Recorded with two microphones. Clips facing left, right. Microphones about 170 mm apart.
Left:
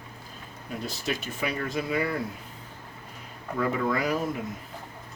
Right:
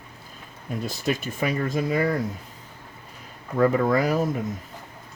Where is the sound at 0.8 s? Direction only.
50° right (ahead or behind).